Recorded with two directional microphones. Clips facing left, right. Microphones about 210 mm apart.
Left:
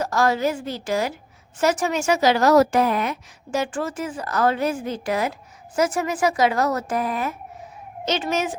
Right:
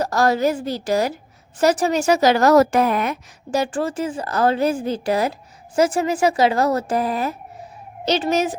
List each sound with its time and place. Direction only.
0.0 s a woman's voice: 35° right (ahead or behind); by 3.2 s 55° right (ahead or behind)
3.5 s a woman's voice: 35° right (ahead or behind)